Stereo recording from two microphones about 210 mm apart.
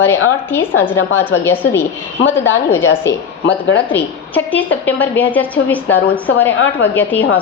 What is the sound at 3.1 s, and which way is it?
A woman's voice, 10° left (ahead or behind).